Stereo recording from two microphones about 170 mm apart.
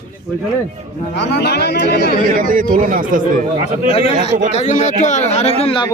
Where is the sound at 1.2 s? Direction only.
75° left (ahead or behind).